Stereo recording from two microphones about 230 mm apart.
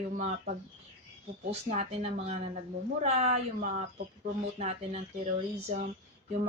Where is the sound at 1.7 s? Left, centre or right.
Right.